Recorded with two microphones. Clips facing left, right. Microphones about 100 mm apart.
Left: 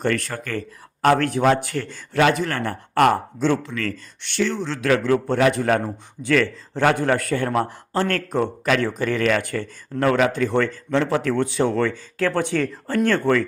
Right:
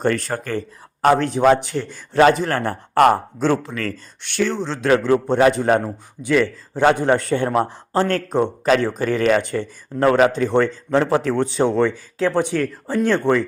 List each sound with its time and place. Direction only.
0.0 s a man's voice: 35° right (ahead or behind)
1.0 s a man's voice: 20° right (ahead or behind)
2.1 s a man's voice: 35° right (ahead or behind)
4.5 s a man's voice: 30° right (ahead or behind)
6.2 s a man's voice: 15° right (ahead or behind)
11.7 s a man's voice: 20° right (ahead or behind)